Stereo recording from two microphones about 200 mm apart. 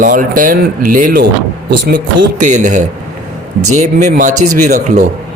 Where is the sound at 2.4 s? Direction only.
40° right (ahead or behind).